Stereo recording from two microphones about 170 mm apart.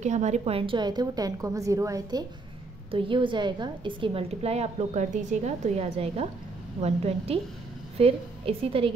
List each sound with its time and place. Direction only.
0.0 s a woman's voice: 45° right (ahead or behind)